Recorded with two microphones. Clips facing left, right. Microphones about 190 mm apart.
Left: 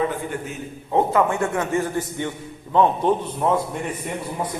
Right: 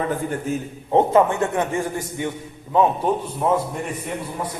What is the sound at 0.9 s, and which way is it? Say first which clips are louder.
A man's voice: right 3 dB; 25° right (ahead or behind).